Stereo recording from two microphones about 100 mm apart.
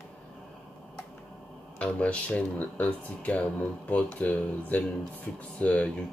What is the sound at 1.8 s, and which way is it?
Speech, 10° left (ahead or behind).